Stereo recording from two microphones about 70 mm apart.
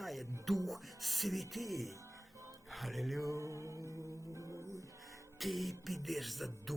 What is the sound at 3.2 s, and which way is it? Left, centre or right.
Music, right.